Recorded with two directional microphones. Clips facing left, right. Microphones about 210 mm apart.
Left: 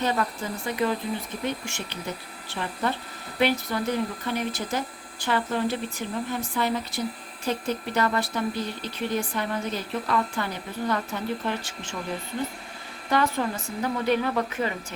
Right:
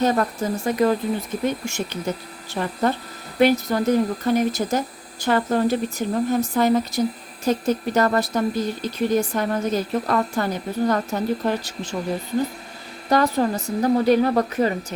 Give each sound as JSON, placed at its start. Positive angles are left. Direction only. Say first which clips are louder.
{"t": 0.0, "sound": "speech", "louder": "right 6 dB", "side_deg": -45}
{"t": 13.1, "sound": "a woman's voice", "louder": "right 6 dB", "side_deg": -40}